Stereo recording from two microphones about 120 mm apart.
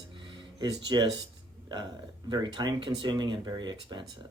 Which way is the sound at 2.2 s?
40° right (ahead or behind).